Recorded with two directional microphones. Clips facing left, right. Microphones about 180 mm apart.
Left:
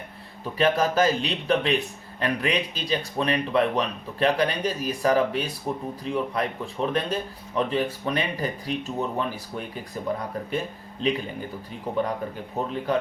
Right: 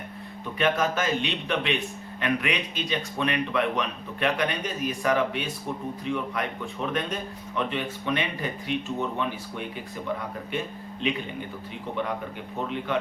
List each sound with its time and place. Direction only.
0.6 s a man's voice: 35° left (ahead or behind)
11.0 s a man's voice: 35° left (ahead or behind)
12.6 s a man's voice: 35° left (ahead or behind)